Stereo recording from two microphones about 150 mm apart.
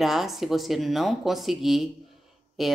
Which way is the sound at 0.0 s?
Centre (ahead or behind).